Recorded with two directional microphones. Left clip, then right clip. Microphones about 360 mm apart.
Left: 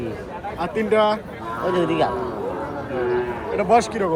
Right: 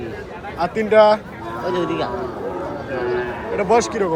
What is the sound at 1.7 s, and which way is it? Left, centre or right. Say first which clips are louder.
Speech: left 2 dB; centre.